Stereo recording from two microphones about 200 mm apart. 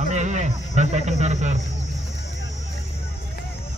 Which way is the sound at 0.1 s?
35° right (ahead or behind).